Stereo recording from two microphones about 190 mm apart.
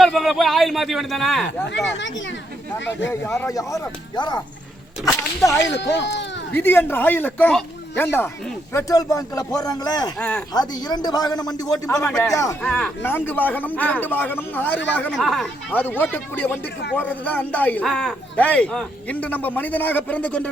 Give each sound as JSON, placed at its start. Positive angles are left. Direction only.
{"t": 0.0, "sound": "speech", "side_deg": 0}
{"t": 1.7, "sound": "speech", "side_deg": 75}
{"t": 3.1, "sound": "a man's voice", "side_deg": 15}
{"t": 5.9, "sound": "speech", "side_deg": 65}
{"t": 6.5, "sound": "a man's voice", "side_deg": 10}
{"t": 10.2, "sound": "a man's voice", "side_deg": 10}
{"t": 10.5, "sound": "a man's voice", "side_deg": 20}
{"t": 11.9, "sound": "speech", "side_deg": 5}
{"t": 12.1, "sound": "a man's voice", "side_deg": 15}
{"t": 12.6, "sound": "a man's voice", "side_deg": 5}